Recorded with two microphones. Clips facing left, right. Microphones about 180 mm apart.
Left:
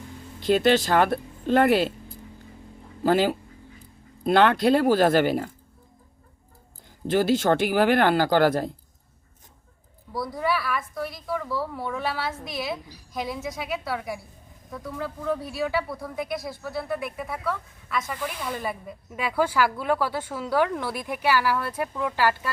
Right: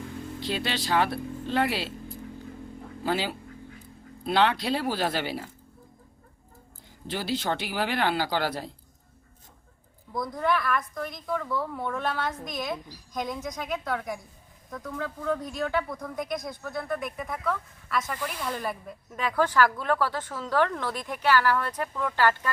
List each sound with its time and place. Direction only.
0.3 s speech: 50° left (ahead or behind)
3.0 s speech: 45° left (ahead or behind)
7.1 s speech: 50° left (ahead or behind)
10.1 s a woman's voice: 5° left (ahead or behind)